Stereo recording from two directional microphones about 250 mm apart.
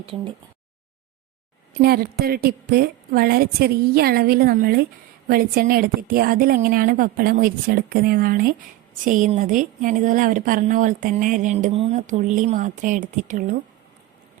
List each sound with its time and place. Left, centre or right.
0.0 s speech: right
1.8 s speech: right